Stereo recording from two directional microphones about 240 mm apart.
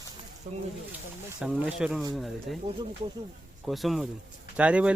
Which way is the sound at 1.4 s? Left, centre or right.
Centre.